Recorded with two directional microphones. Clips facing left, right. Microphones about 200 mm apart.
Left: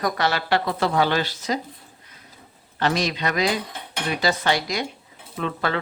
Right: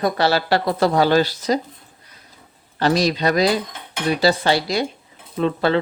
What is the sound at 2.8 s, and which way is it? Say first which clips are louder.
Speech: right 5 dB; 35° right (ahead or behind).